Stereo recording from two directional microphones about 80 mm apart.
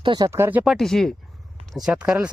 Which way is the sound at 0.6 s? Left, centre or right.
Centre.